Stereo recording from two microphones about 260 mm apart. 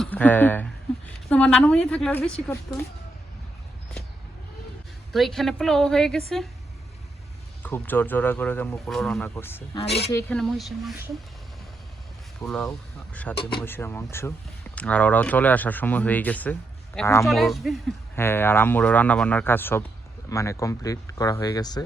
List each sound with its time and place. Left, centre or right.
0.0 s speech: centre
5.1 s speech: centre
7.6 s speech: centre
9.7 s a woman's voice: left
10.1 s speech: centre
12.4 s speech: centre